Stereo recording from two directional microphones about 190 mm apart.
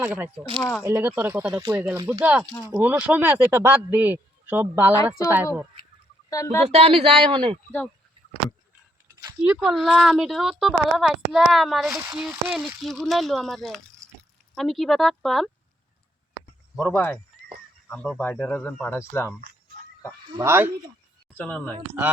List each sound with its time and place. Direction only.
0.0 s speech: 10° right (ahead or behind)
6.3 s speech: 15° left (ahead or behind)
6.7 s speech: 30° right (ahead or behind)
9.2 s a sound: 10° right (ahead or behind)
9.6 s speech: centre (ahead or behind)
16.9 s speech: 10° left (ahead or behind)
20.4 s speech: 15° right (ahead or behind)
21.3 s speech: 10° left (ahead or behind)